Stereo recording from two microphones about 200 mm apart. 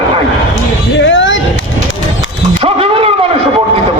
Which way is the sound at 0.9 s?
65° left (ahead or behind).